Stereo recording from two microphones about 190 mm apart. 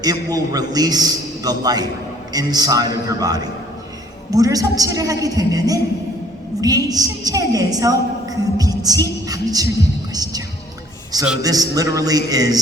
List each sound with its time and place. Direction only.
0.0 s a man's voice: 20° right (ahead or behind)
11.4 s a man's voice: 20° right (ahead or behind)